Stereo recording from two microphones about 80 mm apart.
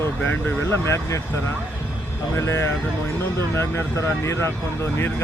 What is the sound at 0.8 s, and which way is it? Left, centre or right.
Speech, left.